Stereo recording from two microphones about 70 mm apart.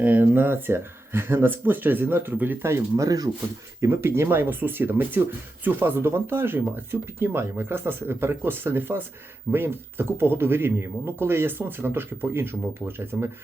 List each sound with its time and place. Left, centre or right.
0.0 s speech: right
2.9 s speech: right
3.8 s speech: right